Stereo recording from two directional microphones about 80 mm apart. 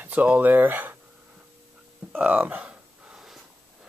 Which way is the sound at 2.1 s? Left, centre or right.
Right.